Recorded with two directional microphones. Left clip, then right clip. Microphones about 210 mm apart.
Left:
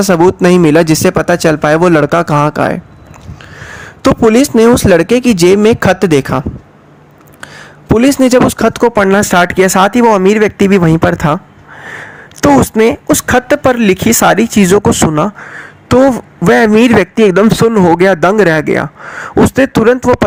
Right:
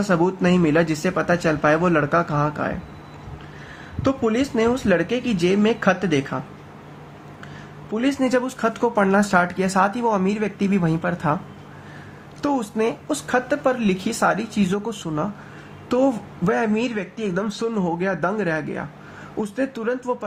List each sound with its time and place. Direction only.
0.0 s speech: 50° left (ahead or behind)
4.0 s speech: 50° left (ahead or behind)
7.9 s speech: 50° left (ahead or behind)
12.4 s speech: 45° left (ahead or behind)